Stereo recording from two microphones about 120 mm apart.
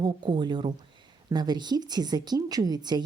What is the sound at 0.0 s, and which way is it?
Speech, 40° right (ahead or behind).